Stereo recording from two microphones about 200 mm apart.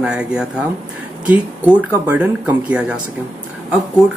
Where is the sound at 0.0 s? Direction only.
5° right (ahead or behind).